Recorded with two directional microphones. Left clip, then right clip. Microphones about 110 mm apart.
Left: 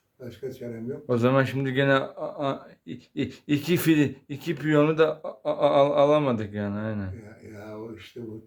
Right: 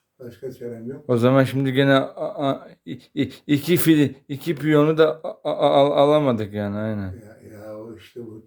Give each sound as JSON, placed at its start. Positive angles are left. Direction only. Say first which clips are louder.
{"t": 1.0, "sound": "speech", "louder": "right 5 dB", "side_deg": -40}